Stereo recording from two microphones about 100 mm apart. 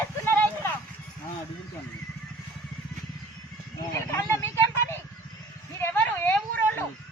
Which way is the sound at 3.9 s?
30° left (ahead or behind).